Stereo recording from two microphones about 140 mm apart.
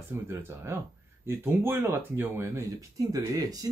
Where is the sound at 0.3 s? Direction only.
15° right (ahead or behind).